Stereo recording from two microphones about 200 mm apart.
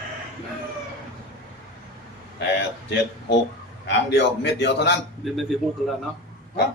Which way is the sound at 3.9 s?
60° left (ahead or behind).